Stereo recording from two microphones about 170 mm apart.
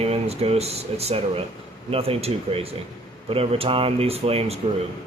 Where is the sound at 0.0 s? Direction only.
35° right (ahead or behind).